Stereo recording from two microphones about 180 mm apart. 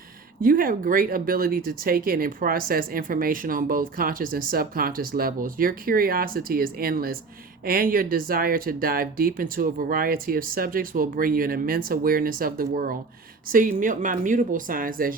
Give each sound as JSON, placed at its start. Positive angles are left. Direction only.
{"t": 0.4, "sound": "speech", "side_deg": -50}